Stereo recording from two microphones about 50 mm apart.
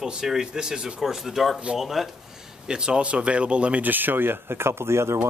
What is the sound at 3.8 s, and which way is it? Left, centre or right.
Speech, right.